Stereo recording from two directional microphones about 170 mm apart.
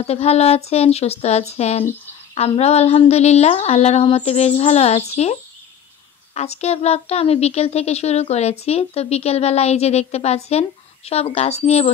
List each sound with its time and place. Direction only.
0.0 s a woman's voice: 40° left (ahead or behind)